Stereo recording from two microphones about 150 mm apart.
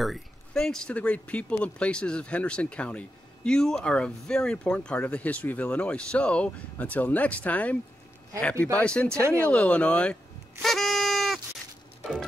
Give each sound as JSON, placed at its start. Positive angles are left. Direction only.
{"t": 0.0, "sound": "speech", "side_deg": 0}
{"t": 8.7, "sound": "speech", "side_deg": 5}
{"t": 9.2, "sound": "speech", "side_deg": -20}
{"t": 9.5, "sound": "speech", "side_deg": 10}
{"t": 10.6, "sound": "bleat", "side_deg": 0}
{"t": 12.0, "sound": "a sound", "side_deg": 5}